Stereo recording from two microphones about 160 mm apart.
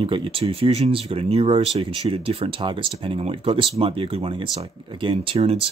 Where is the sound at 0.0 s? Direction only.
35° right (ahead or behind).